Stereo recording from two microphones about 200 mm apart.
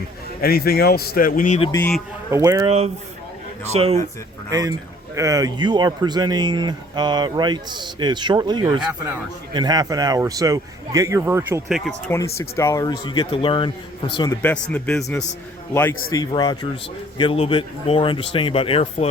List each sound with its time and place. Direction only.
0.4 s a man's voice: 50° left (ahead or behind)
1.7 s a man's voice: 10° left (ahead or behind)
2.3 s a man's voice: 15° right (ahead or behind)
2.6 s a man's voice: 30° right (ahead or behind)
5.1 s speech: 15° right (ahead or behind)
8.8 s a man's voice: 5° right (ahead or behind)
9.5 s a man's voice: 20° right (ahead or behind)
11.7 s a man's voice: 5° left (ahead or behind)
12.1 s a man's voice: 15° left (ahead or behind)
14.4 s a man's voice: 5° left (ahead or behind); by 19.0 s 30° left (ahead or behind)